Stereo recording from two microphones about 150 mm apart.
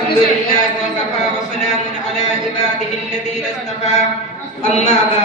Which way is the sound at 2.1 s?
50° left (ahead or behind).